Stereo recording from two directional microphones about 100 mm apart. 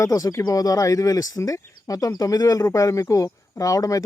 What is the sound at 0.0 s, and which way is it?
Speech, 35° left (ahead or behind).